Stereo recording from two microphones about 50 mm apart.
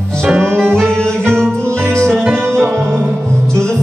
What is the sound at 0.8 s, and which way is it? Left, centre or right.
Music, centre.